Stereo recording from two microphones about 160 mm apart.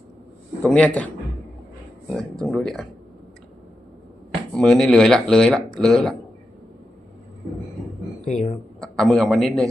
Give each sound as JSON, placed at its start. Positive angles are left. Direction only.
{"t": 0.6, "sound": "speech", "side_deg": 10}
{"t": 2.1, "sound": "speech", "side_deg": 0}
{"t": 4.5, "sound": "speech", "side_deg": 5}
{"t": 8.2, "sound": "speech", "side_deg": 45}
{"t": 8.8, "sound": "a man's voice", "side_deg": 5}